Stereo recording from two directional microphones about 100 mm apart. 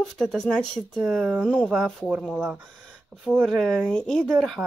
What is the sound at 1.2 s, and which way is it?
Speech, 10° right (ahead or behind).